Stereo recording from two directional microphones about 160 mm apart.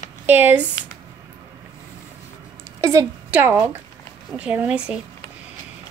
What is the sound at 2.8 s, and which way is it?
A woman's voice, 20° right (ahead or behind).